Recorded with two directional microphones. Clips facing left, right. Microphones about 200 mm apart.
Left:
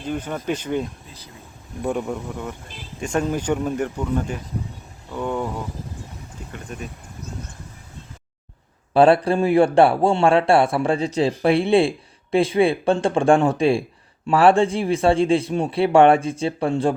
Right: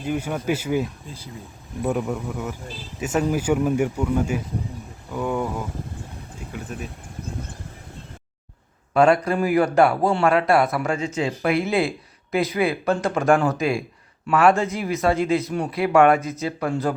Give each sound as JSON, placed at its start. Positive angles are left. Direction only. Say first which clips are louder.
{"t": 0.0, "sound": "speech", "louder": "right 1 dB", "side_deg": -10}
{"t": 6.5, "sound": "speech", "louder": "right 1 dB", "side_deg": 0}
{"t": 8.9, "sound": "a man's voice", "louder": "left 3 dB", "side_deg": 30}